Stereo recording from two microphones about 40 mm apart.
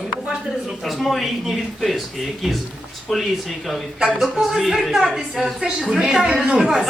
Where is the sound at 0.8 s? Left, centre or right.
Centre.